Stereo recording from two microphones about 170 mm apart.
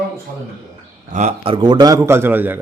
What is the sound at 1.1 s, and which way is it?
A man's voice, 40° right (ahead or behind).